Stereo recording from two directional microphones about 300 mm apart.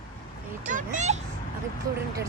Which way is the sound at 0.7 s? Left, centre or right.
Right.